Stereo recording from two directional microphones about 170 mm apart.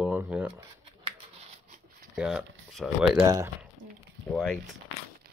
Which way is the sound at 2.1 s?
5° right (ahead or behind).